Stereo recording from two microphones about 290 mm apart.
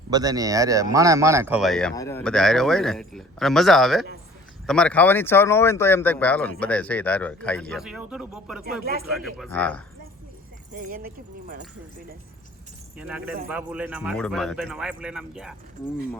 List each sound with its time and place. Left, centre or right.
0.1 s speech: centre
8.8 s speech: right
9.0 s speech: centre
10.8 s speech: right
13.0 s speech: centre